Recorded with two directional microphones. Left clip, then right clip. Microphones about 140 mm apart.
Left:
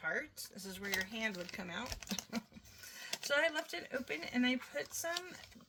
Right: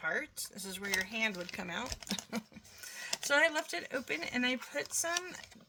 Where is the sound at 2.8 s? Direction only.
40° right (ahead or behind).